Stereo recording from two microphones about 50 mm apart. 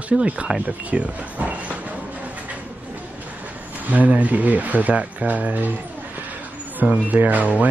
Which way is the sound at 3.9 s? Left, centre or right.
Right.